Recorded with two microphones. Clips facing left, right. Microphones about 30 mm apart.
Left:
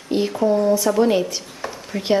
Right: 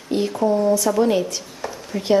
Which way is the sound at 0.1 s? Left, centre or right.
Centre.